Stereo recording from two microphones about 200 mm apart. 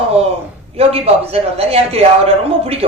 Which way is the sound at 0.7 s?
30° right (ahead or behind).